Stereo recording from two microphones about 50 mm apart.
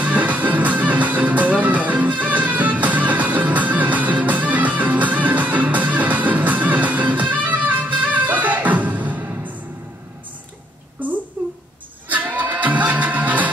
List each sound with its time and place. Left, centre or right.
0.0 s music: right
9.1 s music: right
11.4 s a sound: right
12.1 s music: right